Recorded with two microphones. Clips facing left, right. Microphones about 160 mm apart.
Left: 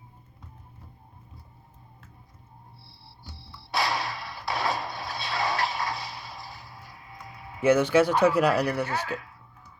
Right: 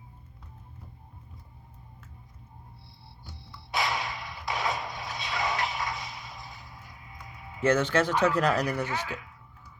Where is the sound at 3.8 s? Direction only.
20° right (ahead or behind).